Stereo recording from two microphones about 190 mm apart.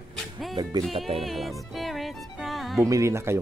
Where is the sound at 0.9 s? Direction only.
30° right (ahead or behind).